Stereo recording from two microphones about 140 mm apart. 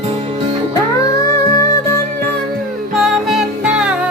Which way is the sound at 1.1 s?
25° left (ahead or behind).